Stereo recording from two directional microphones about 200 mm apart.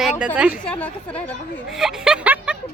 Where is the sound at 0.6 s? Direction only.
5° left (ahead or behind).